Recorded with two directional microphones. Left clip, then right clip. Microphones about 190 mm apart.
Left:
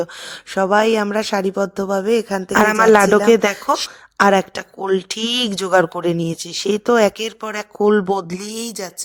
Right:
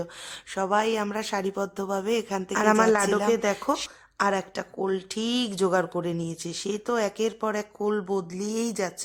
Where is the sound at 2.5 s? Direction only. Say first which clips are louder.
Left 9 dB; 45° left (ahead or behind).